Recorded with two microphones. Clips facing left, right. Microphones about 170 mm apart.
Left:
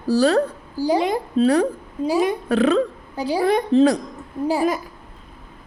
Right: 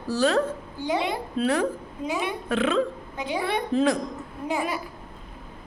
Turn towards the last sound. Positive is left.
turn(degrees=35)  # may be behind; listen again after turning